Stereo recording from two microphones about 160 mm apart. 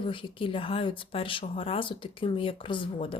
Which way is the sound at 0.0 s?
30° left (ahead or behind).